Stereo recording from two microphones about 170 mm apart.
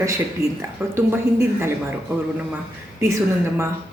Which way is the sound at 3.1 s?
15° right (ahead or behind).